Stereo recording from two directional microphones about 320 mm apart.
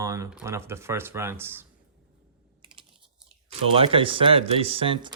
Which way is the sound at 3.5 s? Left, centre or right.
Centre.